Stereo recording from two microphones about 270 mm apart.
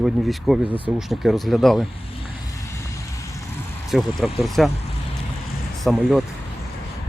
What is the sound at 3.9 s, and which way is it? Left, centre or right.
Speech, centre.